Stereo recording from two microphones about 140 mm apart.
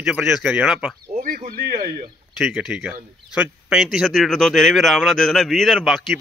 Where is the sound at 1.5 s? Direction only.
90° right.